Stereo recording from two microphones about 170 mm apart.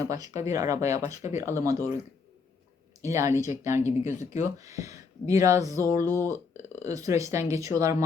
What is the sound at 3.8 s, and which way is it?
Speech, 40° left (ahead or behind).